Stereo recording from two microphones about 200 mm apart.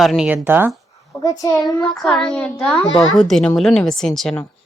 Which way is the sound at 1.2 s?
15° left (ahead or behind).